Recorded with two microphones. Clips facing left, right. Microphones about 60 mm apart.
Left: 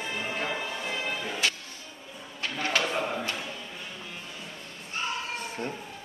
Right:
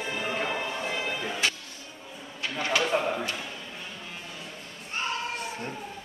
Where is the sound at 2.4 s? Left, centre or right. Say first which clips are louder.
Right 1 dB; centre.